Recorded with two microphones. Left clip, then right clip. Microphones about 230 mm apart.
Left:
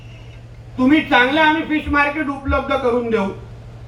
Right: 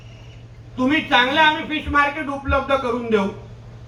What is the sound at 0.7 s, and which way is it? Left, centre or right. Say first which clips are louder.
Speech: left 3 dB; right.